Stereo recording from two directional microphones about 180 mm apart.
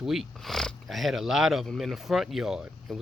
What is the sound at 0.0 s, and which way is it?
Speech, centre (ahead or behind).